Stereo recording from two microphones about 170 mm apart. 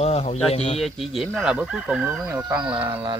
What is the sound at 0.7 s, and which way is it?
Speech, centre (ahead or behind).